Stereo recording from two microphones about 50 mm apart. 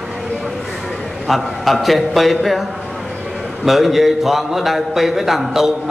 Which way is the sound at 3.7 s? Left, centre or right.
Centre.